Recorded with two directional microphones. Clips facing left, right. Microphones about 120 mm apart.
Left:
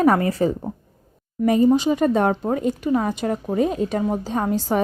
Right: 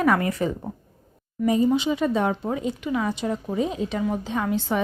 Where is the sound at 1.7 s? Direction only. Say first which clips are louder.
Left 5 dB; 40° left (ahead or behind).